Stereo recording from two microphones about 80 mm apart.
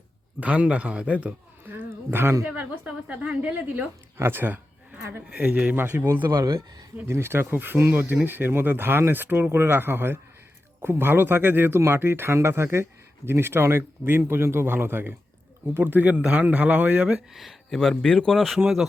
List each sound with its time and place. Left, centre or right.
0.3 s speech: centre
4.2 s a sound: right
5.3 s speech: centre
5.7 s speech: right
6.3 s speech: right
7.1 s speech: right; by 18.9 s centre